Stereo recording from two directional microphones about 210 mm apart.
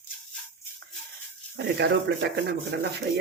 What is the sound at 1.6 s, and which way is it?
Speech, 55° right (ahead or behind).